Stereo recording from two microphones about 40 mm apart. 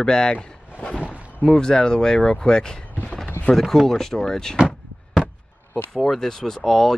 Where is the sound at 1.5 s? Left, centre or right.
Centre.